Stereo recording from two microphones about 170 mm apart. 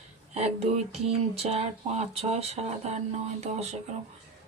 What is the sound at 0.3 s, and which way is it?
Speech, 40° right (ahead or behind).